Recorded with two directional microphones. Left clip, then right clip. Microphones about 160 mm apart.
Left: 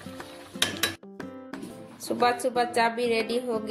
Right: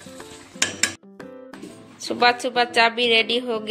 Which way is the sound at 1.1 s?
Centre (ahead or behind).